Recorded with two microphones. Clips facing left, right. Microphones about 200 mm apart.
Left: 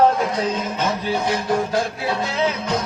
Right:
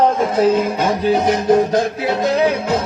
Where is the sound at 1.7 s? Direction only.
40° right (ahead or behind).